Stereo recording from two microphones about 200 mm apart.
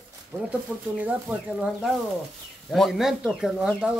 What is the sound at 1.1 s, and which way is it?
Speech, 5° right (ahead or behind).